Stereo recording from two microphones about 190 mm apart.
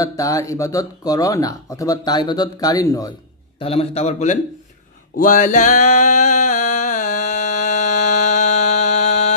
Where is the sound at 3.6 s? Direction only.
30° left (ahead or behind).